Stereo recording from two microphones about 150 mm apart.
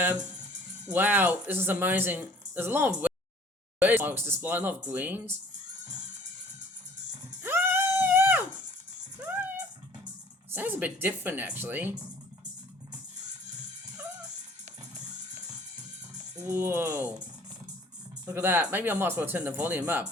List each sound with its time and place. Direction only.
0.9 s speech: 10° right (ahead or behind)
7.4 s music: 15° right (ahead or behind)
10.5 s speech: 15° right (ahead or behind)
16.3 s speech: 20° right (ahead or behind)
18.3 s speech: 15° right (ahead or behind)